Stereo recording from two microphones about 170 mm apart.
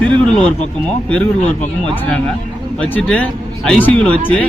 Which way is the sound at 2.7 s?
5° left (ahead or behind).